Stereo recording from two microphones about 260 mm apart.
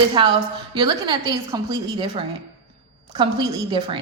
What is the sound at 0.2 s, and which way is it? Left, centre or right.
Speech, centre.